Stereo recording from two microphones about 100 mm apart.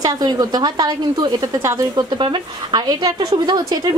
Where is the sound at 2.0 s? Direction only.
50° right (ahead or behind).